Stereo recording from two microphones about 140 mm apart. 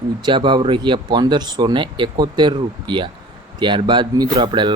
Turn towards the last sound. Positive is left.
turn(degrees=-35)  # may be behind; listen again after turning